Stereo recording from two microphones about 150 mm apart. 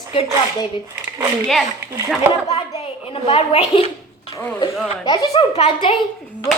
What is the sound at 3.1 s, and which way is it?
Speech, 35° left (ahead or behind).